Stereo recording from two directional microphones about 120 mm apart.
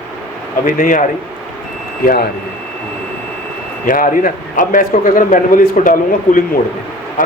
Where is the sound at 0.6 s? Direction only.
90° left.